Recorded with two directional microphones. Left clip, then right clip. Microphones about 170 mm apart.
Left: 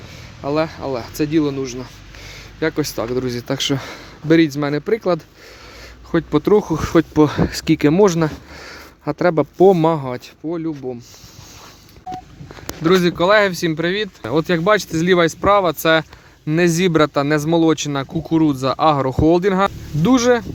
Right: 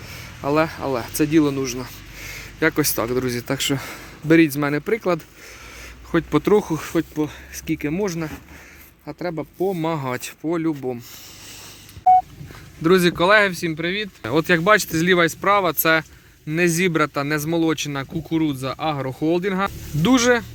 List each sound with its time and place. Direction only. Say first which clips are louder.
0.1 s a man's voice: even; centre (ahead or behind); by 6.7 s 15° left (ahead or behind)
6.7 s speech: left 9 dB; 40° left (ahead or behind)
10.0 s speech: even; 5° left (ahead or behind)
10.4 s speech: right 1 dB; 10° right (ahead or behind)
12.8 s speech: left 1 dB; 5° left (ahead or behind)
13.5 s speech: left 5 dB; 30° left (ahead or behind)
14.2 s a man's voice: even; 10° left (ahead or behind); by 19.7 s 30° left (ahead or behind)
20.0 s speech: left 2 dB; 10° left (ahead or behind)